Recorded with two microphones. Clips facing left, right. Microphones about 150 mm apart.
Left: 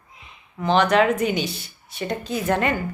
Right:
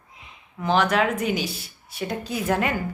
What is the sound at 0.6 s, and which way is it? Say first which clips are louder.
Speech: left 3 dB; 5° right (ahead or behind).